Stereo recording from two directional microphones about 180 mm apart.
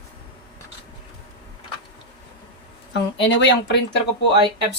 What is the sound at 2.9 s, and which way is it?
Speech, 75° left (ahead or behind).